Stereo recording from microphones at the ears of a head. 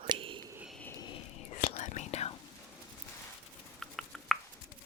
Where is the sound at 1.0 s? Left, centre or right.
Left.